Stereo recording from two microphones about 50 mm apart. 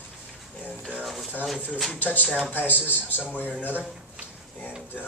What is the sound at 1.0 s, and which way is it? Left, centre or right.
Speech, centre.